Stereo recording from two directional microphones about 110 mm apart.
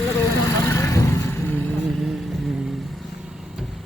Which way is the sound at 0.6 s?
25° left (ahead or behind).